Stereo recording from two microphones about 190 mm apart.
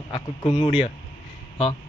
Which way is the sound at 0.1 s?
20° left (ahead or behind).